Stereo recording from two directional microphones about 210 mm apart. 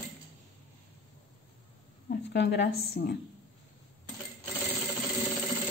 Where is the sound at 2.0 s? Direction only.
50° left (ahead or behind).